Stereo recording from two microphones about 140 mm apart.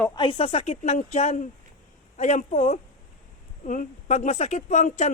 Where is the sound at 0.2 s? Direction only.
40° left (ahead or behind).